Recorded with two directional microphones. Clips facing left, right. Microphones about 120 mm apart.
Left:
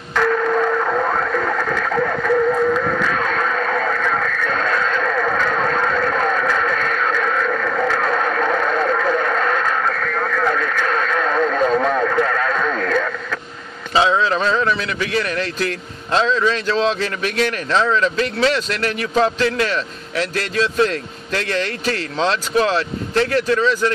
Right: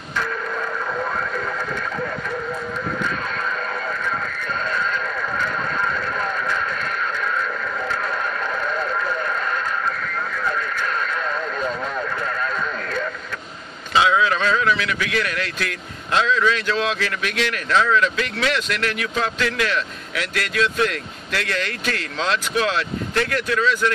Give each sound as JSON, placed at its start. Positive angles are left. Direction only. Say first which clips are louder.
{"t": 0.1, "sound": "radio", "louder": "left 9 dB", "side_deg": 90}
{"t": 13.9, "sound": "speech", "louder": "left 2 dB", "side_deg": 30}